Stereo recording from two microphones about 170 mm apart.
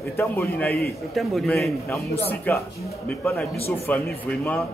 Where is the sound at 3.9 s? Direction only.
10° left (ahead or behind).